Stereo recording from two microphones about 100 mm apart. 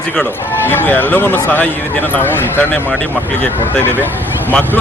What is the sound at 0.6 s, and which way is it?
Speech, 20° left (ahead or behind).